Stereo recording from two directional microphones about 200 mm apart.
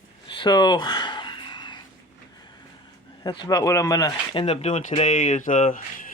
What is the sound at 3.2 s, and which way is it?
Speech, 20° left (ahead or behind).